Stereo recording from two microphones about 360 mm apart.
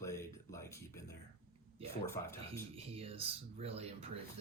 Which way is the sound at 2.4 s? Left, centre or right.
Centre.